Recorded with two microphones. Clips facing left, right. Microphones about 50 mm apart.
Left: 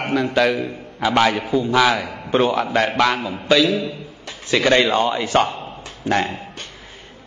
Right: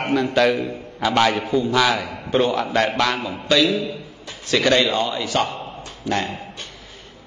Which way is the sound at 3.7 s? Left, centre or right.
Left.